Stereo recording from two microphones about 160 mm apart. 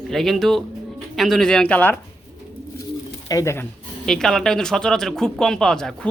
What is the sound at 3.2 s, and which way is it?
Speech, 20° left (ahead or behind).